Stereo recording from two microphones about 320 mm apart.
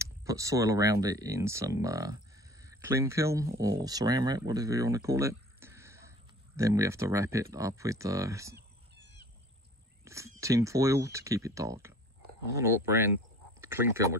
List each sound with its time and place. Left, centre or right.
0.0 s speech: centre
9.0 s bird: right
10.0 s speech: centre